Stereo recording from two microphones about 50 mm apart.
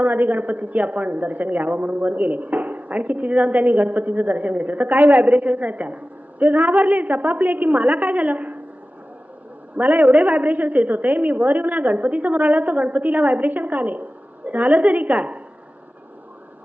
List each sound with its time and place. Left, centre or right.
0.0 s a woman's voice: right
9.7 s a woman's voice: right